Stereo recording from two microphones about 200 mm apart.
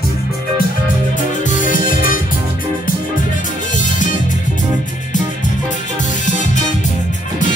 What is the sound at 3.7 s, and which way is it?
Music, 40° left (ahead or behind).